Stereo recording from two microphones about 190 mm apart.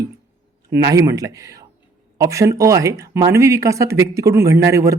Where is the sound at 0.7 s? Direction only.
15° right (ahead or behind).